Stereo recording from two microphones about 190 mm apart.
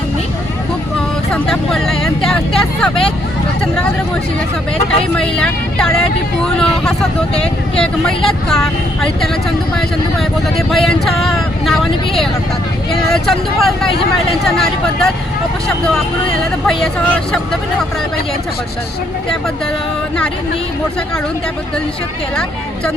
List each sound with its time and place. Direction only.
1.3 s speech: centre (ahead or behind)
5.1 s speech: 5° left (ahead or behind)
10.7 s speech: centre (ahead or behind)
16.6 s speech: 5° left (ahead or behind)